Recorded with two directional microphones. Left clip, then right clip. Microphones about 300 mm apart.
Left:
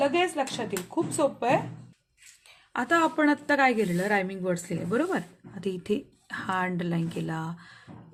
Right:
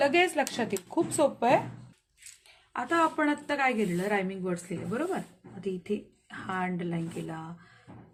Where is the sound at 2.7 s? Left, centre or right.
Left.